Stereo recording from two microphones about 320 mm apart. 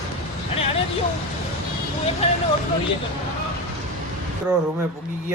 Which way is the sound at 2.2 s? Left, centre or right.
Centre.